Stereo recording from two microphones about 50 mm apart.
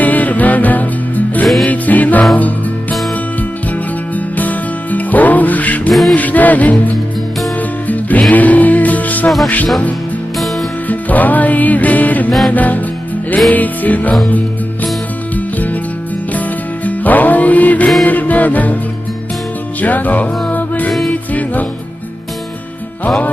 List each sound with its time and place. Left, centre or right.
0.0 s music: left
4.4 s music: left
5.9 s music: centre
6.1 s music: left
10.8 s music: left
16.8 s music: left
19.8 s music: left